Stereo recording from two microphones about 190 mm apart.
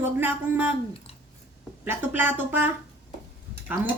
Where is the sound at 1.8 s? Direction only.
10° right (ahead or behind).